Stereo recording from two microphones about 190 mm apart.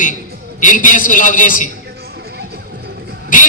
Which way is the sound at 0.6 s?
45° left (ahead or behind).